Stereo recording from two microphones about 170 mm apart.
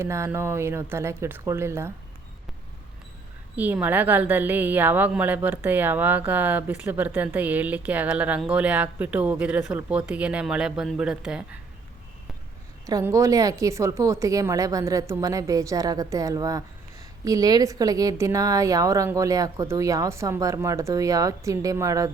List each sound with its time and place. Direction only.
0.0 s a woman's voice: 15° right (ahead or behind)
3.5 s a woman's voice: 10° right (ahead or behind)
12.8 s a woman's voice: 20° right (ahead or behind)